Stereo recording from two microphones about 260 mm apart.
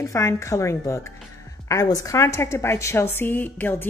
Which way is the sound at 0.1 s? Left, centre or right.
Centre.